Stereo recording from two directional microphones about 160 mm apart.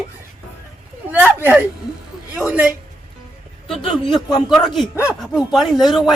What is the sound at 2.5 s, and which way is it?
A woman's voice, 5° right (ahead or behind).